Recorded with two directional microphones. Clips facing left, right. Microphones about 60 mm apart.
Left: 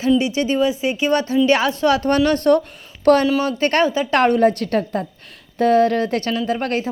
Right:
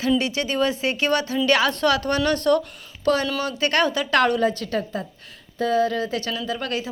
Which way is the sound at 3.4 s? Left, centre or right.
Left.